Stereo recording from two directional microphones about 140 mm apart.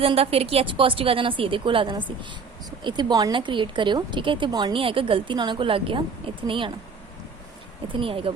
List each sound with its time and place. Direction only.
0.0 s speech: 45° right (ahead or behind)
7.9 s speech: 40° right (ahead or behind)